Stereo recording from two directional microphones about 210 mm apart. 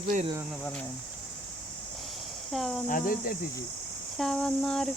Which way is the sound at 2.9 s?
40° left (ahead or behind).